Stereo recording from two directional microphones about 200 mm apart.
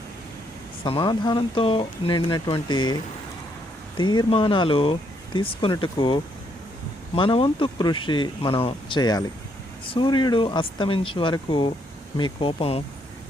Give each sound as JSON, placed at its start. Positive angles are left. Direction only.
{"t": 0.9, "sound": "speech", "side_deg": 25}
{"t": 7.2, "sound": "speech", "side_deg": 25}